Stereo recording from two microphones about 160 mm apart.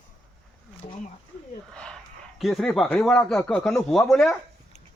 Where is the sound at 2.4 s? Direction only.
Centre (ahead or behind).